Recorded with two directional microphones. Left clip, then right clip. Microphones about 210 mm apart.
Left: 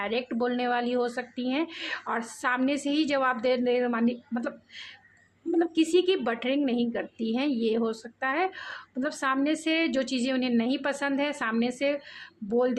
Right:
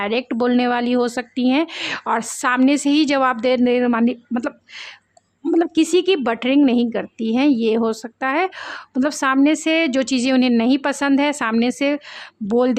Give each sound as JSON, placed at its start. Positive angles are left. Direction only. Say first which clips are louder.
{"t": 0.0, "sound": "a woman's voice", "louder": "right 9 dB", "side_deg": -45}